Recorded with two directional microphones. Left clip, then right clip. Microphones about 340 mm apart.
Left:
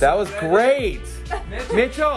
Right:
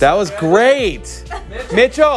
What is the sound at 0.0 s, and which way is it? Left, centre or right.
Speech, centre.